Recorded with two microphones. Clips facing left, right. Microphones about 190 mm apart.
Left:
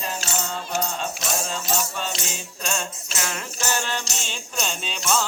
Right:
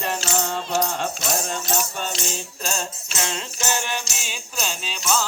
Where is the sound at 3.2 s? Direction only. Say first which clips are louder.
Right 1 dB; 20° right (ahead or behind).